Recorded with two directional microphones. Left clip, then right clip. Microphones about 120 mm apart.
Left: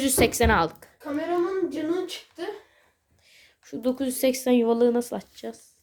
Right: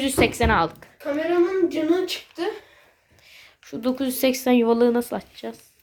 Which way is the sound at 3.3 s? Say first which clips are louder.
Right 3 dB; 20° left (ahead or behind).